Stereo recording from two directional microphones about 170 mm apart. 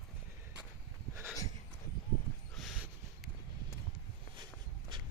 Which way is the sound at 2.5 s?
Centre (ahead or behind).